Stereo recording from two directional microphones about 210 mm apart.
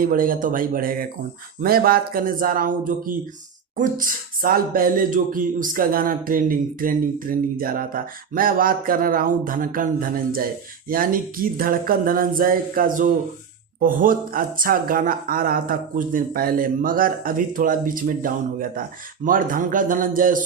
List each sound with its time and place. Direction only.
0.0 s speech: 40° right (ahead or behind)